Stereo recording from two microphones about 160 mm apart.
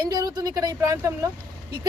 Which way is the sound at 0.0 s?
25° right (ahead or behind).